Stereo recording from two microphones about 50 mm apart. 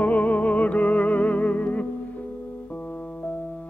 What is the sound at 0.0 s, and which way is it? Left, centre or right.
Music, left.